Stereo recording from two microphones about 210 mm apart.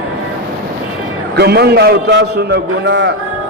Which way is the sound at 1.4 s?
50° right (ahead or behind).